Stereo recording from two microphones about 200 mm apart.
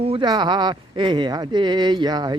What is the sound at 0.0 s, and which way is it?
Speech, 25° right (ahead or behind).